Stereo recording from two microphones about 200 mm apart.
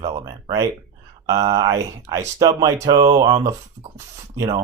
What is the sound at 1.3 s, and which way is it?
Speech, 20° right (ahead or behind).